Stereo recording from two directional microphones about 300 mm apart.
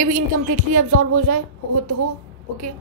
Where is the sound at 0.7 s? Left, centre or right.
Right.